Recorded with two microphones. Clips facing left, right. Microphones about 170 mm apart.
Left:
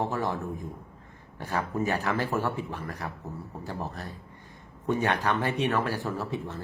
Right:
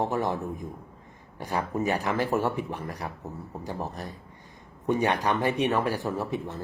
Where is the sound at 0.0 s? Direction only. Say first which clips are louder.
Right 2 dB; 20° right (ahead or behind).